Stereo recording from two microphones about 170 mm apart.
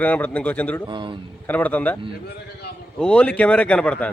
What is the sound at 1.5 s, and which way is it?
Speech, 10° left (ahead or behind).